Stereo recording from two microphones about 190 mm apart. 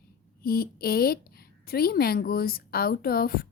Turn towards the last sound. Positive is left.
turn(degrees=55)  # may be behind; listen again after turning